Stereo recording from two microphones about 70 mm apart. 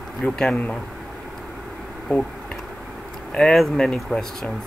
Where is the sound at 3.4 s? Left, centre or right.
Centre.